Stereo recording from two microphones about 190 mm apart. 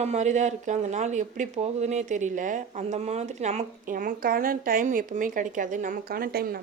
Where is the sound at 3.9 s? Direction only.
50° right (ahead or behind).